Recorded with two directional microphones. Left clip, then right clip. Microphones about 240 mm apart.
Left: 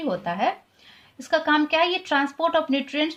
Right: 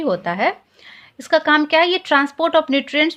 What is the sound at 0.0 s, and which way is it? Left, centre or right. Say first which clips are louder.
Speech: right 6 dB; right.